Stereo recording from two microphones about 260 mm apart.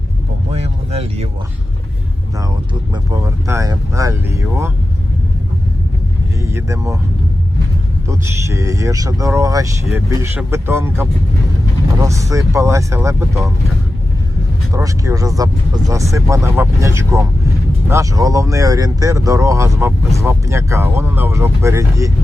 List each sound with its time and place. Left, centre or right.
0.5 s a sound: right
2.9 s speech: centre
6.4 s speech: centre
8.0 s speech: centre
12.0 s speech: centre
14.7 s speech: centre